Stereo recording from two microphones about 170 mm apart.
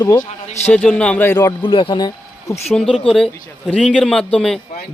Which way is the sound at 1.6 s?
30° left (ahead or behind).